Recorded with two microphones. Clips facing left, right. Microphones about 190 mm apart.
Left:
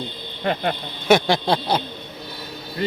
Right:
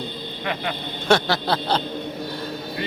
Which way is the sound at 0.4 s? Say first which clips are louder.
Left 5 dB; 45° left (ahead or behind).